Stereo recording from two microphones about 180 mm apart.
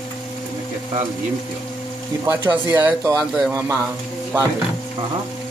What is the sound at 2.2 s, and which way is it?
A man's voice, 10° right (ahead or behind).